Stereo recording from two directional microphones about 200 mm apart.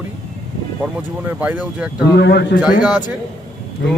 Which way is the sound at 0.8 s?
5° right (ahead or behind).